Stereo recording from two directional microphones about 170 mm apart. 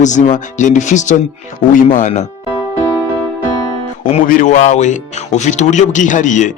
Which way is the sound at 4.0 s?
50° left (ahead or behind).